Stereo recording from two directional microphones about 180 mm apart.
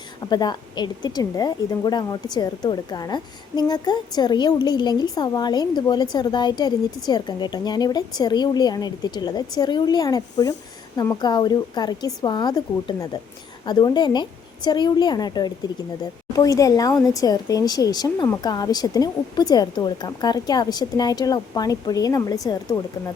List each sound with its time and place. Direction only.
0.3 s a woman's voice: 25° left (ahead or behind)